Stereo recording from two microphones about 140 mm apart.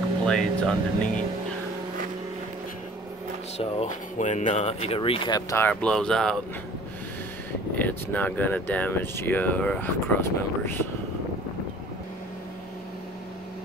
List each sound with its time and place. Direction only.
0.2 s speech: 5° left (ahead or behind)
3.5 s speech: 50° left (ahead or behind)
5.5 s speech: 15° left (ahead or behind)
7.7 s speech: 10° left (ahead or behind)